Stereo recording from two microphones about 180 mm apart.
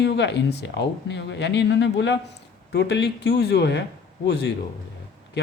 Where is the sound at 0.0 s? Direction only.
75° left (ahead or behind).